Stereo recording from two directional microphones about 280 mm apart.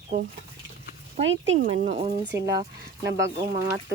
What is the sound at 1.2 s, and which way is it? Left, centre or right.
Speech, right.